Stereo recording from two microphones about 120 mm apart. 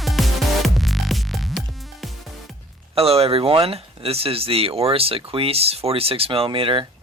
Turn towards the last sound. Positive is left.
turn(degrees=-45)  # may be behind; listen again after turning